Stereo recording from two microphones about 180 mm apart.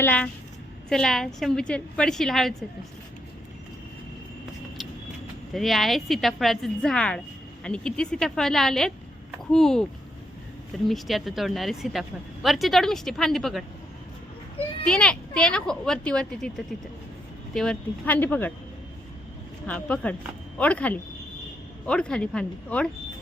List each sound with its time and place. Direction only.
0.0 s a woman's voice: 10° left (ahead or behind)
5.5 s a woman's voice: centre (ahead or behind)
10.8 s a woman's voice: centre (ahead or behind)
14.8 s a woman's voice: 5° left (ahead or behind)
19.6 s a woman's voice: 10° left (ahead or behind)